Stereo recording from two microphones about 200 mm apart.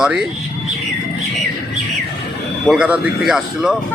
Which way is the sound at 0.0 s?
5° right (ahead or behind).